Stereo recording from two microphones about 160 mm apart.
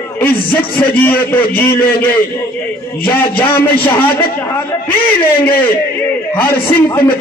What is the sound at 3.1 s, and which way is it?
Speech, 15° left (ahead or behind).